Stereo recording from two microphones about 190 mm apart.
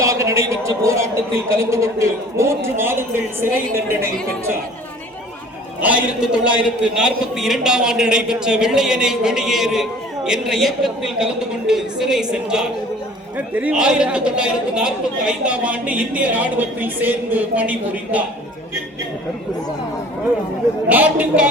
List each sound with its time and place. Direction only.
0.0 s a man's voice: 15° right (ahead or behind)
5.8 s a man's voice: 5° right (ahead or behind)
20.9 s a man's voice: 10° right (ahead or behind)